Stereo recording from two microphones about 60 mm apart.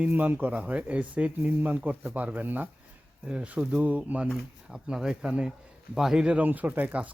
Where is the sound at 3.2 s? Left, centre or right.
Centre.